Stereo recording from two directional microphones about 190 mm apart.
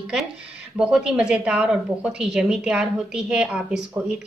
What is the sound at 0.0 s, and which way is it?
Speech, 5° right (ahead or behind).